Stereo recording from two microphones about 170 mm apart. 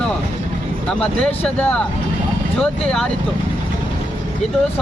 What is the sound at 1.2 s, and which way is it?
Speech, 5° left (ahead or behind).